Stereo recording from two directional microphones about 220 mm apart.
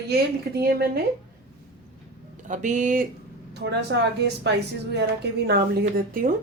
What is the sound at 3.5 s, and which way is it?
A woman's voice, 50° right (ahead or behind).